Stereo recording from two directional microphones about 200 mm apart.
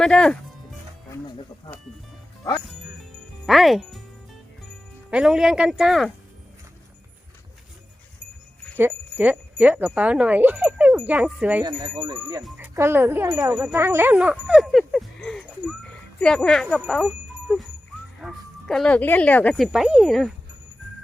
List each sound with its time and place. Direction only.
0.0 s speech: 5° left (ahead or behind)
3.4 s speech: centre (ahead or behind)
5.1 s speech: 5° right (ahead or behind)
8.8 s a child's voice: 10° right (ahead or behind)
11.8 s a child's voice: 20° right (ahead or behind); by 16.8 s 5° left (ahead or behind)
18.2 s speech: centre (ahead or behind)